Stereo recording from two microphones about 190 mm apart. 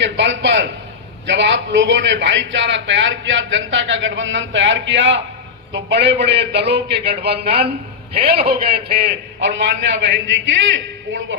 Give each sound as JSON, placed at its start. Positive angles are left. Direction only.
{"t": 0.0, "sound": "a sound", "side_deg": -70}
{"t": 1.3, "sound": "a man's voice", "side_deg": -65}
{"t": 7.4, "sound": "a man's voice", "side_deg": -30}
{"t": 8.2, "sound": "a man's voice", "side_deg": -55}